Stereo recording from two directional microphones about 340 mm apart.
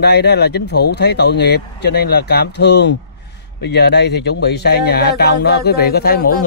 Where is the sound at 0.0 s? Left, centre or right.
Left.